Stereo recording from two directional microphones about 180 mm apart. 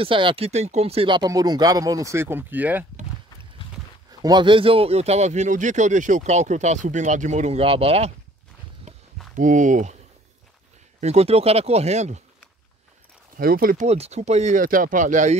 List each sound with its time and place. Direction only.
0.0 s speech: 30° right (ahead or behind); by 2.9 s 10° right (ahead or behind)
4.2 s speech: 25° right (ahead or behind)
9.3 s speech: 45° right (ahead or behind)
11.0 s speech: 35° right (ahead or behind)
13.4 s speech: 55° right (ahead or behind)
13.8 s speech: 35° right (ahead or behind)